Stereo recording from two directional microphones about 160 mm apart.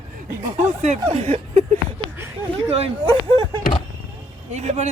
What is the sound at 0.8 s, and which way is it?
Speech, 40° right (ahead or behind).